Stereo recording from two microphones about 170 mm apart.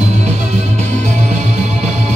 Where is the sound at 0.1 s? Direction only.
40° right (ahead or behind).